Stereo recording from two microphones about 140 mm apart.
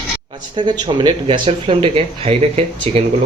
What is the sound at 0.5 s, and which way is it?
Speech, 30° right (ahead or behind).